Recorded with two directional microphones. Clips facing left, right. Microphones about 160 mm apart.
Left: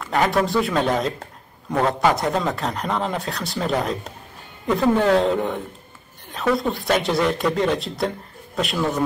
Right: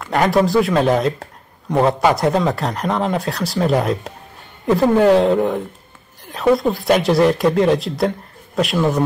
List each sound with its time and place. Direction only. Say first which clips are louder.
0.0 s speech: right 4 dB; centre (ahead or behind)
4.7 s a woman's voice: right 5 dB; 40° right (ahead or behind)
5.1 s speech: right 5 dB; centre (ahead or behind)
6.6 s speech: right 5 dB; centre (ahead or behind)